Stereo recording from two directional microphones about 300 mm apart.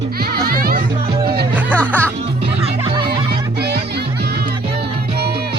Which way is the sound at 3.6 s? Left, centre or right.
Right.